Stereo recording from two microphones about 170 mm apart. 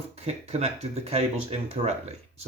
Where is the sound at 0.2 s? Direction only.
40° right (ahead or behind).